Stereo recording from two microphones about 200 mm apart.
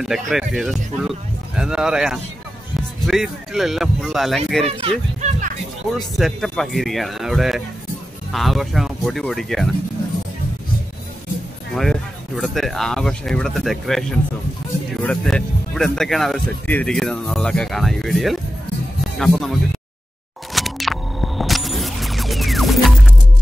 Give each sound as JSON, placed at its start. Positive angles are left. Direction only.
{"t": 0.0, "sound": "speech", "side_deg": 0}
{"t": 4.6, "sound": "a child's voice", "side_deg": -35}
{"t": 5.9, "sound": "speech", "side_deg": 0}
{"t": 11.7, "sound": "speech", "side_deg": 0}
{"t": 20.5, "sound": "music", "side_deg": 0}